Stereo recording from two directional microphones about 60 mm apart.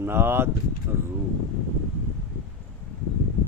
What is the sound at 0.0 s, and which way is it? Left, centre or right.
Speech, right.